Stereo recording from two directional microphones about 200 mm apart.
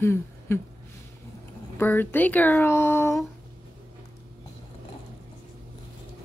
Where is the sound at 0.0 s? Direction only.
10° left (ahead or behind).